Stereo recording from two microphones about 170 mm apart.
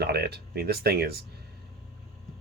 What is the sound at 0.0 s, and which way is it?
Speech, 75° right (ahead or behind).